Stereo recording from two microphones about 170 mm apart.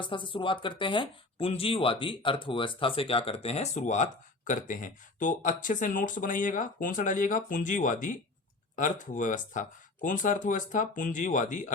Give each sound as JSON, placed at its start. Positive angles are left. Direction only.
{"t": 0.0, "sound": "speech", "side_deg": 30}